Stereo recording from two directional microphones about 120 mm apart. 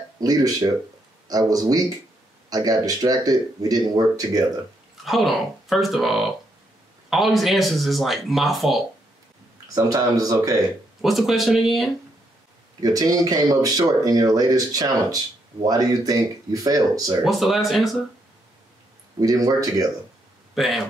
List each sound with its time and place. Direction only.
0.2 s speech: 30° right (ahead or behind)
5.0 s speech: centre (ahead or behind)
9.8 s speech: 30° right (ahead or behind)
11.0 s speech: centre (ahead or behind)
12.8 s speech: 30° right (ahead or behind)
17.2 s speech: centre (ahead or behind)
19.1 s speech: 30° right (ahead or behind)
20.5 s speech: centre (ahead or behind)